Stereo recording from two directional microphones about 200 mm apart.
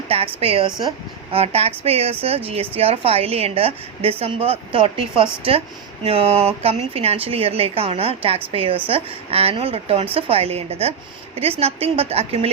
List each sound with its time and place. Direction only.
0.1 s a woman's voice: 30° right (ahead or behind)